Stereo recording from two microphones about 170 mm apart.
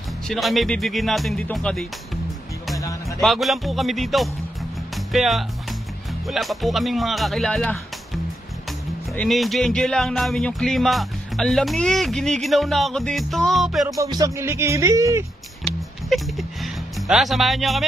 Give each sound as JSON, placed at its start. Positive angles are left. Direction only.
{"t": 0.3, "sound": "speech", "side_deg": 0}
{"t": 2.8, "sound": "music", "side_deg": 20}
{"t": 3.2, "sound": "speech", "side_deg": 0}
{"t": 4.9, "sound": "music", "side_deg": 0}
{"t": 6.2, "sound": "speech", "side_deg": 0}
{"t": 9.1, "sound": "speech", "side_deg": 5}
{"t": 14.1, "sound": "speech", "side_deg": -20}
{"t": 16.1, "sound": "speech", "side_deg": 0}